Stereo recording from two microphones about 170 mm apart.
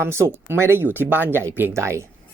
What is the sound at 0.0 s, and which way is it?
Speech, 15° right (ahead or behind).